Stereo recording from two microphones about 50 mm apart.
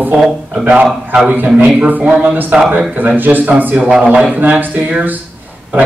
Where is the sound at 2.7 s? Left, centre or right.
Right.